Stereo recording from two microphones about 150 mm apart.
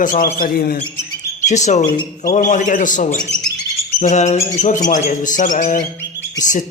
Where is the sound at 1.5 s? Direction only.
50° left (ahead or behind).